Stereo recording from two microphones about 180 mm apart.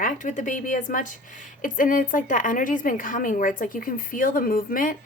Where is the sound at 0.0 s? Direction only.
45° left (ahead or behind).